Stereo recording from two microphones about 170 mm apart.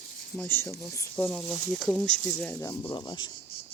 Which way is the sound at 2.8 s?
25° left (ahead or behind).